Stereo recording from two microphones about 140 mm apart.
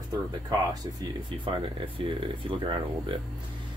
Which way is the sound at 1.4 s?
35° right (ahead or behind).